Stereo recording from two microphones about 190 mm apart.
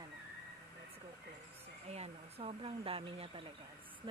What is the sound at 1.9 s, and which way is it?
Speech, 35° right (ahead or behind).